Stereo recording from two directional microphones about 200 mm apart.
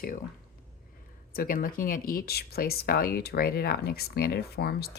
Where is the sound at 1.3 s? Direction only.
45° left (ahead or behind).